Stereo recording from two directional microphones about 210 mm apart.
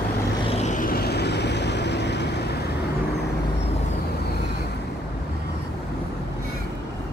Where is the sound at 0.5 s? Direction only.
30° left (ahead or behind); by 2.4 s 55° left (ahead or behind).